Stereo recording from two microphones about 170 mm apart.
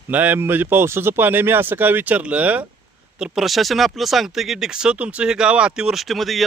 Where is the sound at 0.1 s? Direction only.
10° right (ahead or behind).